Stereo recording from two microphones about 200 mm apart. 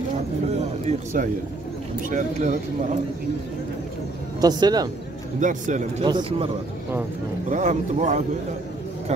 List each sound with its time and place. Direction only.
0.6 s a man's voice: 35° right (ahead or behind)
4.4 s speech: 20° right (ahead or behind)
5.4 s speech: 40° right (ahead or behind)
6.0 s speech: 25° right (ahead or behind)
7.4 s speech: 35° right (ahead or behind)